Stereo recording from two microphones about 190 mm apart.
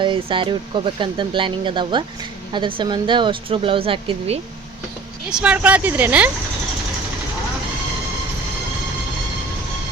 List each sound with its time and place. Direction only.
0.0 s speech: 25° right (ahead or behind)
5.3 s speech: 5° right (ahead or behind)